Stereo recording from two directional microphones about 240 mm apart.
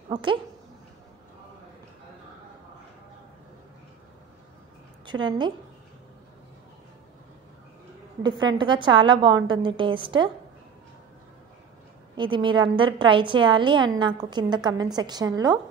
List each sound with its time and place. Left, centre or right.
0.1 s speech: centre
5.0 s a woman's voice: centre
8.2 s a woman's voice: centre
12.2 s a woman's voice: centre